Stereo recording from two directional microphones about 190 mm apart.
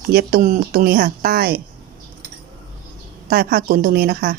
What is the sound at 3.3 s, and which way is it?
Speech, 50° right (ahead or behind).